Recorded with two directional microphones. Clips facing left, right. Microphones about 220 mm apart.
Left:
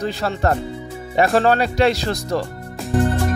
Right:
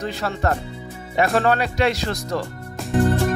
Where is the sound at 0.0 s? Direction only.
35° left (ahead or behind).